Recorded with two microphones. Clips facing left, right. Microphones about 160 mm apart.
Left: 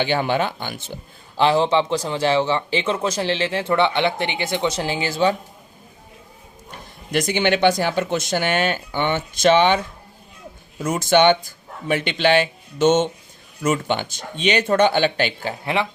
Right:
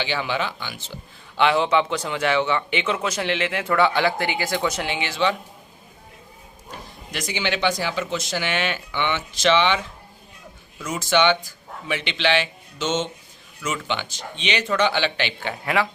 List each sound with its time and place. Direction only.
0.0 s speech: 50° left (ahead or behind)
1.4 s a man's voice: 35° left (ahead or behind)
7.1 s speech: 55° left (ahead or behind)
15.6 s speech: 25° left (ahead or behind)